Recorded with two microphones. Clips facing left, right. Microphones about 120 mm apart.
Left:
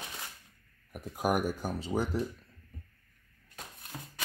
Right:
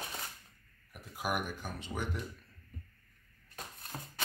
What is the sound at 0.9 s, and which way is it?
Speech, 40° left (ahead or behind).